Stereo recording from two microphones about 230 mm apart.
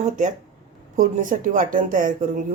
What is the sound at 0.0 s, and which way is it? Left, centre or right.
A woman's voice, right.